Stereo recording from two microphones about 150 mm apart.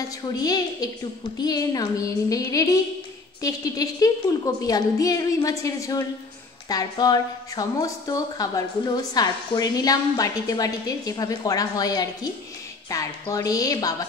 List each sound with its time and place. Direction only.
0.4 s a woman's voice: 25° left (ahead or behind)